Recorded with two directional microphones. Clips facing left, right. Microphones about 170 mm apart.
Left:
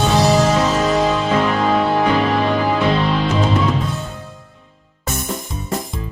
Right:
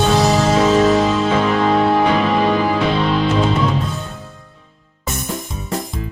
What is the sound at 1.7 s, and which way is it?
Music, centre (ahead or behind).